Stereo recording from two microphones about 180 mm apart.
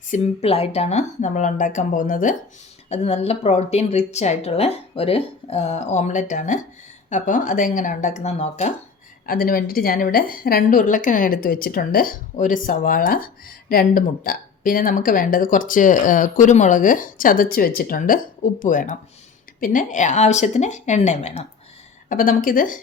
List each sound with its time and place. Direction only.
0.1 s speech: 35° left (ahead or behind)
2.9 s a woman's voice: 35° left (ahead or behind)
9.2 s a woman's voice: 55° left (ahead or behind)